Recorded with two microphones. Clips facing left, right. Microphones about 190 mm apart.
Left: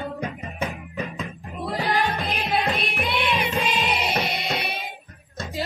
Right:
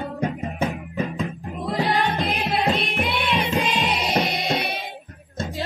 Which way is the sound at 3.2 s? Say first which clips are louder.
Right 2 dB; centre (ahead or behind).